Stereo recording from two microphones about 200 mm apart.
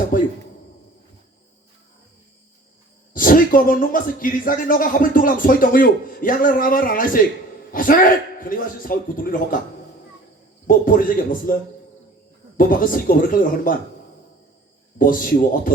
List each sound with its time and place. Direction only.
0.1 s speech: 45° left (ahead or behind)
3.1 s speech: 45° left (ahead or behind)
10.7 s speech: 45° left (ahead or behind)
12.5 s speech: 45° left (ahead or behind)
14.9 s speech: 45° left (ahead or behind)